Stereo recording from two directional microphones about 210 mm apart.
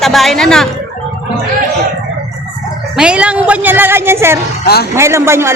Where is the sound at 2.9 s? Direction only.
5° right (ahead or behind).